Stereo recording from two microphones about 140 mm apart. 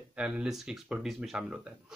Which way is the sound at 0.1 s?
5° right (ahead or behind).